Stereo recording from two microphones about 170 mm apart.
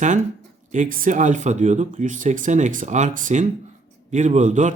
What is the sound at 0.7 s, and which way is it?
Speech, 50° right (ahead or behind).